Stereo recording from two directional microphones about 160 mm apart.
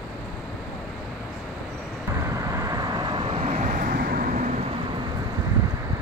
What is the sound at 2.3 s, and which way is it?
Vehicle, 20° right (ahead or behind).